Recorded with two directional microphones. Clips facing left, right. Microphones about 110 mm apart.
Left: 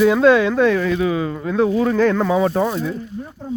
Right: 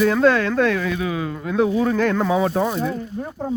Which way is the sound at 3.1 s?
60° right (ahead or behind).